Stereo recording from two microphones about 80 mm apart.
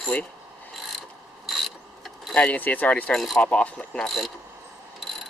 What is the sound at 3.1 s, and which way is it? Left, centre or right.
Speech, centre.